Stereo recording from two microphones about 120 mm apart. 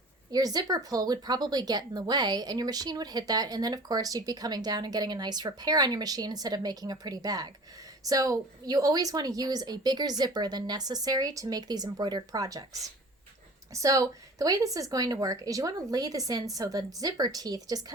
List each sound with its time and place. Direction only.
0.3 s speech: 30° right (ahead or behind)
13.7 s speech: 30° right (ahead or behind)